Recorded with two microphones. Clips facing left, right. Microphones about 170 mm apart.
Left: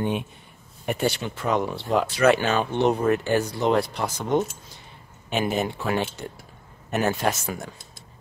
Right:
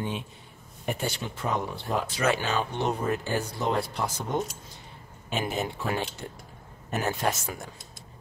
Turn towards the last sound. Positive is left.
turn(degrees=80)